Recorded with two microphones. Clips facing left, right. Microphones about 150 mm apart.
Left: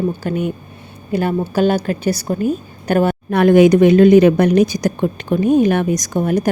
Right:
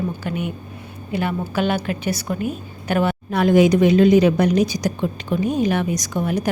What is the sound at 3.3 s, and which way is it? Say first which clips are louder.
A woman's voice: left 5 dB; 60° left (ahead or behind).